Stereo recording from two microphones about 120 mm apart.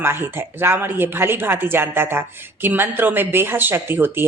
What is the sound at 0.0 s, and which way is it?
Speech, 20° right (ahead or behind).